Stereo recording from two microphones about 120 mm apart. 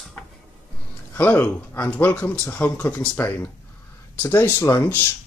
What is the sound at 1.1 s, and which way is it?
Speech, 15° left (ahead or behind).